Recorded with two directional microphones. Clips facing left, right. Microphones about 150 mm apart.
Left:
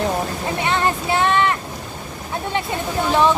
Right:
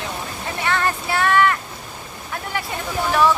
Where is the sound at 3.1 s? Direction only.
20° left (ahead or behind).